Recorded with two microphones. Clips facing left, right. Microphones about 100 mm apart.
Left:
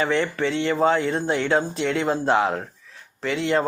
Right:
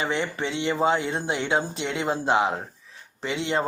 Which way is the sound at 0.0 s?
15° right (ahead or behind).